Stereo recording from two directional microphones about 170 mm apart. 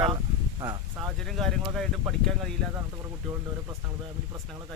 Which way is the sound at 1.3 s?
Centre (ahead or behind).